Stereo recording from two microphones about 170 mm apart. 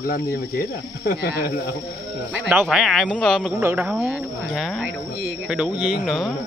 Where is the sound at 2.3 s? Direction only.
10° right (ahead or behind).